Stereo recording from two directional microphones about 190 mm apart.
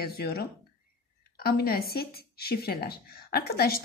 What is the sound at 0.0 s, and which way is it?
Speech, 55° left (ahead or behind).